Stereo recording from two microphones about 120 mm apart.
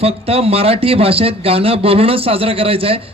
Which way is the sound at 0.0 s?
55° right (ahead or behind).